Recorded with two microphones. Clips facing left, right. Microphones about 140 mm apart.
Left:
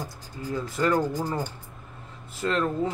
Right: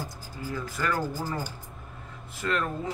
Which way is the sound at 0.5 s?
25° left (ahead or behind).